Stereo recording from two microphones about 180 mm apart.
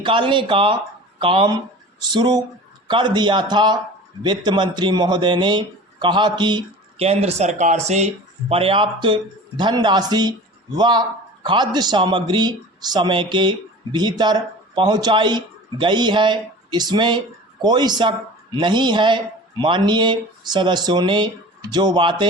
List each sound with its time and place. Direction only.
0.0 s speech: 25° right (ahead or behind)